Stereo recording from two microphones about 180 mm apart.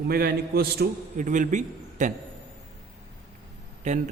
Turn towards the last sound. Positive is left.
turn(degrees=-40)  # may be behind; listen again after turning